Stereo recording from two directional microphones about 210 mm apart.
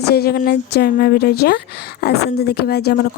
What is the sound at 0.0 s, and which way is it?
Speech, 50° left (ahead or behind).